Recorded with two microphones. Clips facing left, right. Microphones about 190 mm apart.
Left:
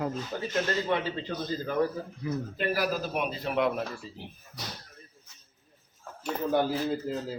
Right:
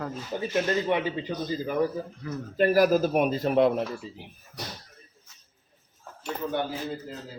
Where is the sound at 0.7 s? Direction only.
15° right (ahead or behind).